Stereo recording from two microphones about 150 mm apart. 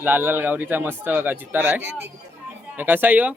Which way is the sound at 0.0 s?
10° right (ahead or behind).